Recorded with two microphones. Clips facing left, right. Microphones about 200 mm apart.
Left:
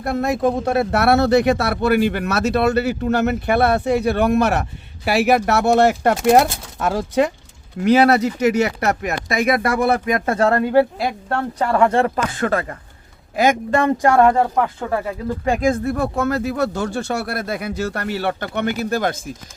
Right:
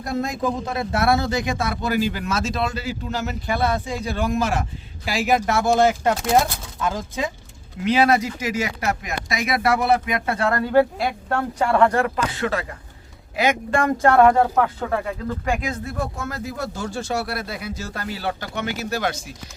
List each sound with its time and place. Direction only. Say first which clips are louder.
0.0 s speech: left 5 dB; 60° left (ahead or behind); by 10.5 s 40° left (ahead or behind)
10.5 s speech: left 1 dB; 15° left (ahead or behind)
10.9 s speech: left 1 dB; centre (ahead or behind)
11.9 s speech: left 4 dB; 30° left (ahead or behind)
12.3 s speech: left 4 dB; 50° left (ahead or behind)
14.2 s speech: right 2 dB; 5° left (ahead or behind)
15.4 s speech: left 8 dB; 35° left (ahead or behind)
15.7 s speech: left 8 dB; 60° left (ahead or behind)